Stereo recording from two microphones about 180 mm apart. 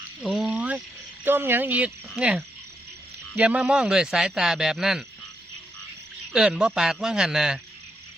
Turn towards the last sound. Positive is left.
turn(degrees=-5)  # may be behind; listen again after turning